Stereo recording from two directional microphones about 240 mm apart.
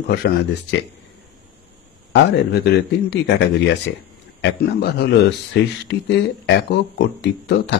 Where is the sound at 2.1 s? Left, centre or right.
Left.